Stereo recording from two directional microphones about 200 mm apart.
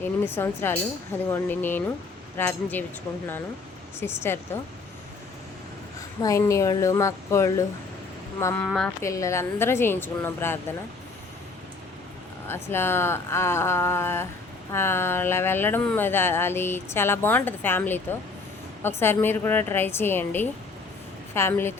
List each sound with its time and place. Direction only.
0.0 s speech: 10° left (ahead or behind)
4.0 s speech: 10° left (ahead or behind)
6.2 s speech: 15° left (ahead or behind)
8.6 s a woman's voice: 5° left (ahead or behind)
9.0 s speech: 15° left (ahead or behind)
12.5 s speech: 10° left (ahead or behind)